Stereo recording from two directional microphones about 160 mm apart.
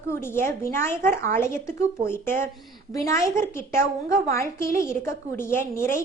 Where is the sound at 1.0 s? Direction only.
60° right (ahead or behind).